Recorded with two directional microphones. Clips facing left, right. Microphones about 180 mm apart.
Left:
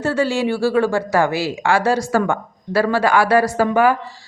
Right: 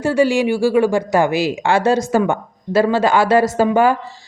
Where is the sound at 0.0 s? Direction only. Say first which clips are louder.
Right 4 dB; 15° right (ahead or behind).